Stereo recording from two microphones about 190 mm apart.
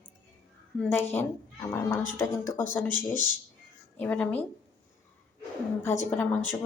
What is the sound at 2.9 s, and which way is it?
Speech, 20° right (ahead or behind).